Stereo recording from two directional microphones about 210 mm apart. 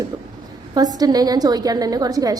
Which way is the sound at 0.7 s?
20° right (ahead or behind).